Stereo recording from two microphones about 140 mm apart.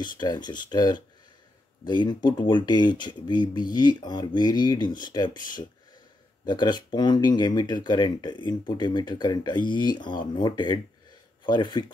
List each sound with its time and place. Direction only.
0.0 s speech: 30° left (ahead or behind)
6.4 s speech: 30° left (ahead or behind)